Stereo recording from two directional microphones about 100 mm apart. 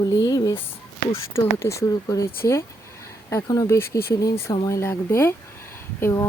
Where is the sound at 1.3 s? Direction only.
30° left (ahead or behind).